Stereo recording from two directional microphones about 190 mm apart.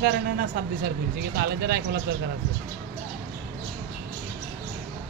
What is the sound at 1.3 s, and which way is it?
Speech, 55° right (ahead or behind).